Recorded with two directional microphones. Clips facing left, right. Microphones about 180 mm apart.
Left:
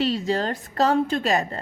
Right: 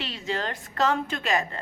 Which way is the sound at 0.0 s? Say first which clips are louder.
Left 8 dB; 40° left (ahead or behind).